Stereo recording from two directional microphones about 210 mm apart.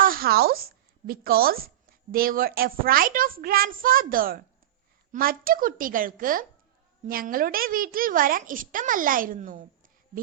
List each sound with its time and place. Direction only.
0.0 s a woman's voice: 45° right (ahead or behind)